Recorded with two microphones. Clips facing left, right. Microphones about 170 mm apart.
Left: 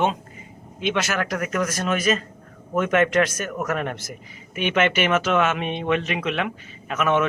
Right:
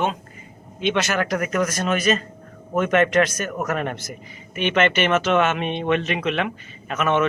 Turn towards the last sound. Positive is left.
turn(degrees=5)  # may be behind; listen again after turning